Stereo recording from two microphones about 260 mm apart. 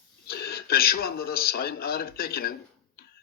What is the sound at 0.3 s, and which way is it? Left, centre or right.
A man's voice, left.